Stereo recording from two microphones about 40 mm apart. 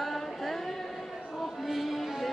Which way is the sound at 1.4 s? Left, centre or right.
Centre.